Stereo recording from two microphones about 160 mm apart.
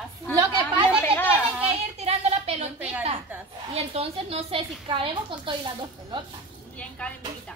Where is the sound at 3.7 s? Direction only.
40° right (ahead or behind).